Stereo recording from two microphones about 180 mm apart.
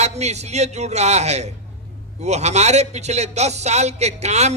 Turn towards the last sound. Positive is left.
turn(degrees=-40)  # may be behind; listen again after turning